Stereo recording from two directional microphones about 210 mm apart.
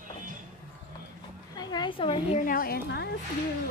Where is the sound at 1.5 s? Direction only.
20° left (ahead or behind).